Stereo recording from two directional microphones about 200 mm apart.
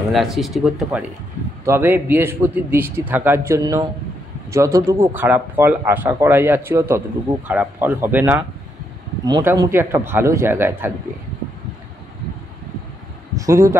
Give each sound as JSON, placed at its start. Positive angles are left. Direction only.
{"t": 0.1, "sound": "speech", "side_deg": 0}
{"t": 13.3, "sound": "speech", "side_deg": -15}